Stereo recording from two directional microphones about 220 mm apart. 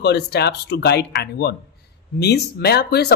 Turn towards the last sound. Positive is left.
turn(degrees=50)  # may be behind; listen again after turning